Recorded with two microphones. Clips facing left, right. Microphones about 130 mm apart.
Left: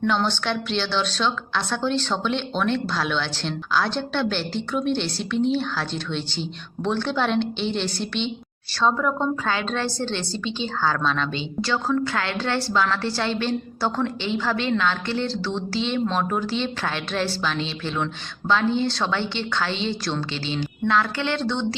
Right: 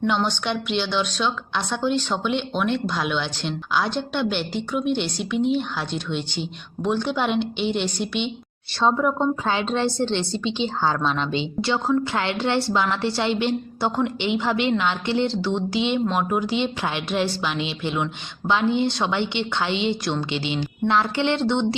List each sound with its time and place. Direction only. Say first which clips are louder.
0.0 s a woman's voice: even; 15° right (ahead or behind)